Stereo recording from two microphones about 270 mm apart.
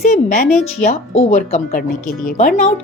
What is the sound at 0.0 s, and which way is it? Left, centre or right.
A woman's voice, left.